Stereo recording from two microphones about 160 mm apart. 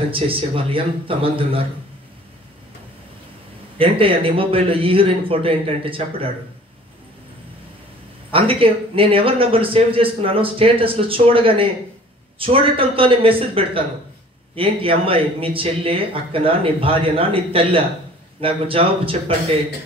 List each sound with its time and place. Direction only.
0.1 s a man's voice: 35° right (ahead or behind)
3.7 s a man's voice: 35° right (ahead or behind)
8.3 s a man's voice: 35° right (ahead or behind)